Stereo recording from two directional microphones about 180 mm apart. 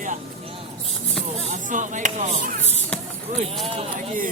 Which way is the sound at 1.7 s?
45° right (ahead or behind).